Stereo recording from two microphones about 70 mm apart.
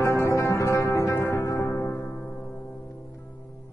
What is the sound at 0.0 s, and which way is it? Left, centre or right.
Music, left.